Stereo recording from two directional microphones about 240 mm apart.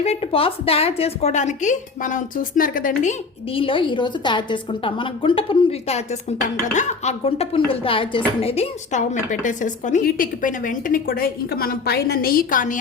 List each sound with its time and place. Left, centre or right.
0.0 s a woman's voice: left